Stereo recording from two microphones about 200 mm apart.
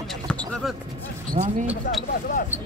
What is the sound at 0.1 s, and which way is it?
Basketball bounce, 5° left (ahead or behind).